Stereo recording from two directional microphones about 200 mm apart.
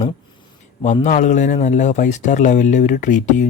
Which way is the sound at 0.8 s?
35° left (ahead or behind).